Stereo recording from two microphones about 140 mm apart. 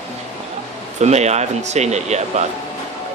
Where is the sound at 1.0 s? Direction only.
55° right (ahead or behind).